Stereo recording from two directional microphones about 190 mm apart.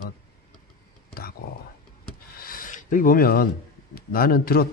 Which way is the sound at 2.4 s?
45° left (ahead or behind).